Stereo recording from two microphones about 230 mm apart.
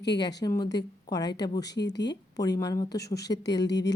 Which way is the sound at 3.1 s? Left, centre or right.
Centre.